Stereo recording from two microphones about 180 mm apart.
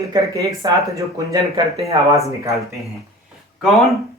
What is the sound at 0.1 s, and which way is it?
Speech, 15° right (ahead or behind).